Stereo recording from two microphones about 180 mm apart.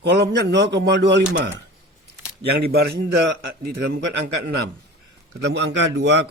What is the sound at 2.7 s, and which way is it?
Speech, 60° right (ahead or behind).